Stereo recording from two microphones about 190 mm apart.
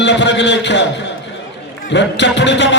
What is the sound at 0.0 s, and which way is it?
A man's voice, 70° left (ahead or behind).